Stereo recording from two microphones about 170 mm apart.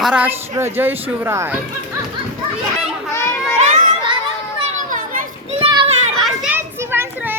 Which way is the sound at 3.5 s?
45° right (ahead or behind).